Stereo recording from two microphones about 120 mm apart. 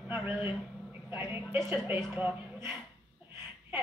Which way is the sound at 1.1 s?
15° right (ahead or behind).